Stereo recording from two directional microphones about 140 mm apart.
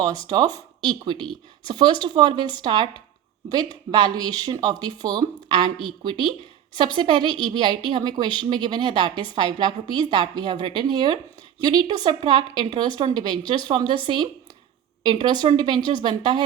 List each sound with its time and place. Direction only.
0.3 s a woman's voice: 30° right (ahead or behind)
15.0 s a woman's voice: 35° right (ahead or behind)